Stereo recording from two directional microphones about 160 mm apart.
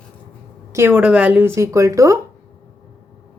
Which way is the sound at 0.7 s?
15° right (ahead or behind).